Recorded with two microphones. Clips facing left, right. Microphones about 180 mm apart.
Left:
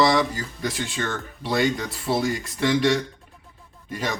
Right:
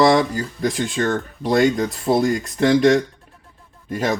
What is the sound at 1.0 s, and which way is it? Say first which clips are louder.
Speech: right 8 dB; 40° right (ahead or behind).